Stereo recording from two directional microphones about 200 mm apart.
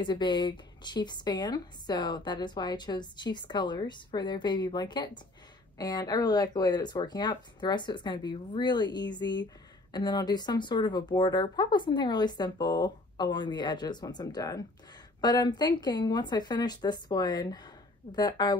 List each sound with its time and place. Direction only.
0.0 s speech: 20° left (ahead or behind)